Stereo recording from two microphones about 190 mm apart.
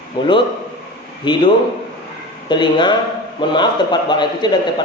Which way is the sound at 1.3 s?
25° left (ahead or behind).